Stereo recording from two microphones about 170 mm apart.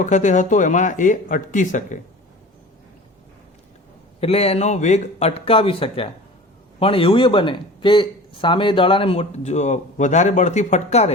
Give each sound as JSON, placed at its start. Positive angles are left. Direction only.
{"t": 0.0, "sound": "speech", "side_deg": 45}
{"t": 4.2, "sound": "speech", "side_deg": 35}